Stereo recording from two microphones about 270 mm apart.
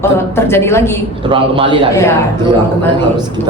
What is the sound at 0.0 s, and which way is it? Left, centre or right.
Speech, centre.